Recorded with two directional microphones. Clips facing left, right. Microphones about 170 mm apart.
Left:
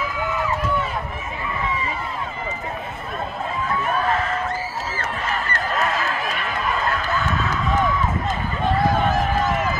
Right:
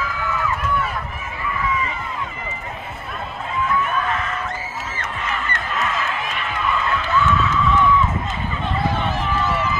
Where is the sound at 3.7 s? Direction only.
35° left (ahead or behind).